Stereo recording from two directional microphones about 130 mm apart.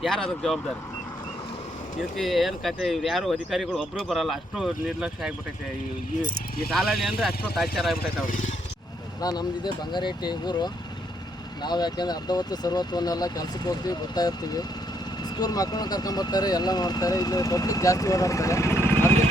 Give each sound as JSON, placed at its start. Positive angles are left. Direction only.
{"t": 0.0, "sound": "speech", "side_deg": 5}
{"t": 2.0, "sound": "speech", "side_deg": 0}
{"t": 6.7, "sound": "speech", "side_deg": 0}
{"t": 9.2, "sound": "speech", "side_deg": 30}